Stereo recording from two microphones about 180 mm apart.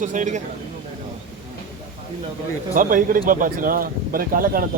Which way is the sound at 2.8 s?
50° right (ahead or behind).